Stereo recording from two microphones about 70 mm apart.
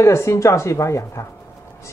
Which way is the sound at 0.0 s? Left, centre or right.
Left.